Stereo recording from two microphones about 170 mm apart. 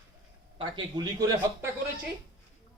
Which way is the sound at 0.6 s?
25° right (ahead or behind).